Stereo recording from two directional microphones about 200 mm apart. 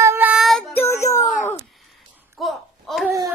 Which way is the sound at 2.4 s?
Centre (ahead or behind).